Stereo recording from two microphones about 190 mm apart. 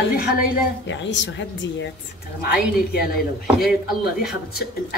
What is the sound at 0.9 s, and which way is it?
A woman's voice, 70° left (ahead or behind).